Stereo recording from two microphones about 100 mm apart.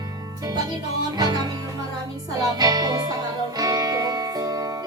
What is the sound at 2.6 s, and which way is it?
Music, 40° right (ahead or behind).